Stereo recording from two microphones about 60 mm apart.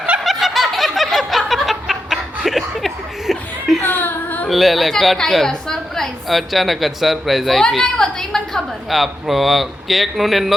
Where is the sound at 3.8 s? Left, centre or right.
Left.